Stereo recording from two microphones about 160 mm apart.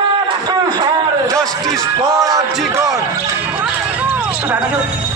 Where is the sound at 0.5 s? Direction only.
25° right (ahead or behind).